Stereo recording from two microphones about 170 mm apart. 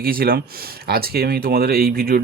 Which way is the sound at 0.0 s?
60° right (ahead or behind).